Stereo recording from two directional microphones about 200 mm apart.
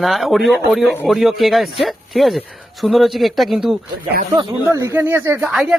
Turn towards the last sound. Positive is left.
turn(degrees=0)  # may be behind; listen again after turning